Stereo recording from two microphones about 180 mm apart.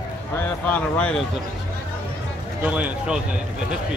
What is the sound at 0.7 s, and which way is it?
Speech, 10° left (ahead or behind).